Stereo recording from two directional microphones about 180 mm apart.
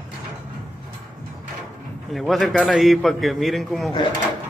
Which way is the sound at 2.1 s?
Centre (ahead or behind).